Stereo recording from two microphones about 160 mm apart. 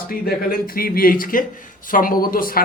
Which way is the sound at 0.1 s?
65° left (ahead or behind).